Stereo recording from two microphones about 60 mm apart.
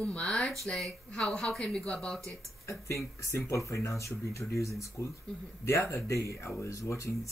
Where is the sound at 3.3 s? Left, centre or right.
Left.